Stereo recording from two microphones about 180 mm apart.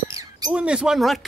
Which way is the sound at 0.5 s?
5° right (ahead or behind).